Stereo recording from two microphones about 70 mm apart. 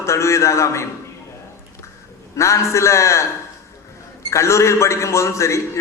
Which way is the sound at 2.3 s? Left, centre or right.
Left.